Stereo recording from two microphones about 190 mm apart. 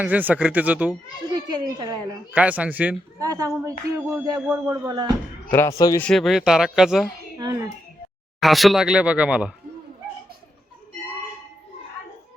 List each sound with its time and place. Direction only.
0.0 s speech: 10° right (ahead or behind)
1.3 s a child's voice: 20° right (ahead or behind)
2.3 s speech: 5° right (ahead or behind)
5.5 s speech: 15° left (ahead or behind)
6.0 s speech: centre (ahead or behind)
7.3 s a child's voice: 20° right (ahead or behind)
8.4 s speech: centre (ahead or behind)